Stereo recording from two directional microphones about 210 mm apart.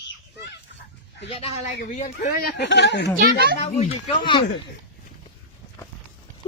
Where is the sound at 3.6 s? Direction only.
25° left (ahead or behind).